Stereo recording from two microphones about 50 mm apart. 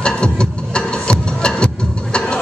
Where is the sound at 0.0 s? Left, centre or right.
Centre.